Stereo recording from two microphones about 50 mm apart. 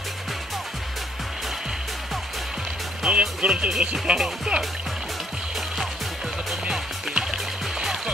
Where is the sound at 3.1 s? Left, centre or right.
Right.